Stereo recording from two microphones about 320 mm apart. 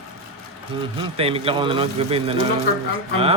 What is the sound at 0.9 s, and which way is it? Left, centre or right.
Speech, centre.